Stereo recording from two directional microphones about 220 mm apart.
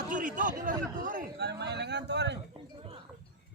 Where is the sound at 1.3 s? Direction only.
50° right (ahead or behind).